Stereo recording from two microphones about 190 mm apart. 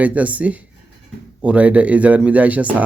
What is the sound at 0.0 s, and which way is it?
Speech, 5° right (ahead or behind).